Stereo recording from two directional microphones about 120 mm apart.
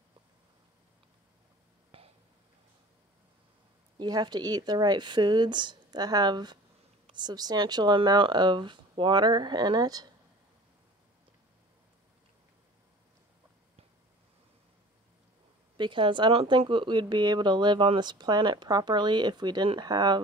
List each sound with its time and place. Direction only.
1.9 s a sound: 50° right (ahead or behind)
4.0 s speech: 35° right (ahead or behind)
15.8 s speech: 45° right (ahead or behind)